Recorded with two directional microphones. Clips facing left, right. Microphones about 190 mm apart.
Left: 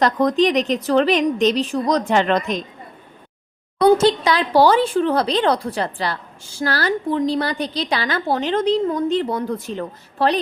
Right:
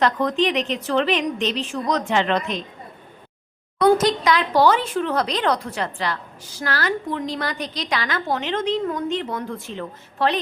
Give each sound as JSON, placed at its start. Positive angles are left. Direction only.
{"t": 0.0, "sound": "speech", "side_deg": 40}
{"t": 3.8, "sound": "speech", "side_deg": 30}